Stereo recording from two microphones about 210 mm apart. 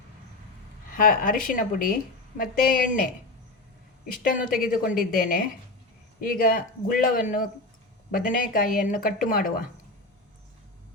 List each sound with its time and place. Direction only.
0.9 s a woman's voice: 40° left (ahead or behind)